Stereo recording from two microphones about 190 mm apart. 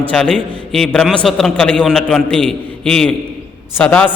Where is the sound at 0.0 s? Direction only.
5° left (ahead or behind).